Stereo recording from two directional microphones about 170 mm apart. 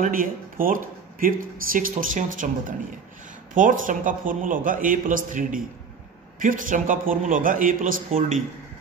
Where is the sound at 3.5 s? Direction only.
50° right (ahead or behind).